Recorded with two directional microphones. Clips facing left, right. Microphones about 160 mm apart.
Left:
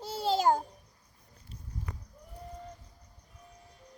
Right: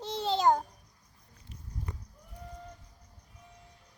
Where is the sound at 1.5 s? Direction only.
30° left (ahead or behind).